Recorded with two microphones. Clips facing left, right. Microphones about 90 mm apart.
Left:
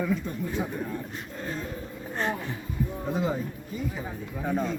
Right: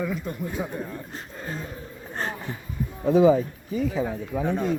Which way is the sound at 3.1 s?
90° right.